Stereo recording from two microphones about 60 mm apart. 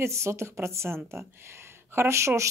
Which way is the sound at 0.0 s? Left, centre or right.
Right.